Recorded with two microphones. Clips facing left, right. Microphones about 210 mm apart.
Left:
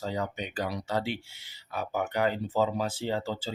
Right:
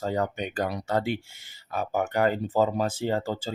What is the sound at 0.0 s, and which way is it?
Speech, 50° right (ahead or behind).